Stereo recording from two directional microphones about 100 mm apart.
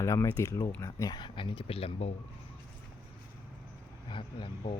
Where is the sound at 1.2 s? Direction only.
55° left (ahead or behind); by 2.1 s 70° left (ahead or behind).